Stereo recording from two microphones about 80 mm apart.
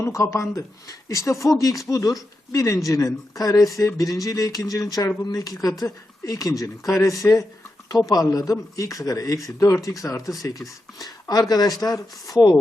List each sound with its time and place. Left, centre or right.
0.0 s speech: left